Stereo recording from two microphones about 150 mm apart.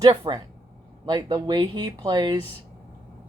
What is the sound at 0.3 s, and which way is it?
Speech, 30° right (ahead or behind).